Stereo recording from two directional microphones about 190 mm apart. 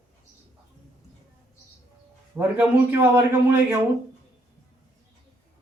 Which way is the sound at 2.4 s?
10° right (ahead or behind).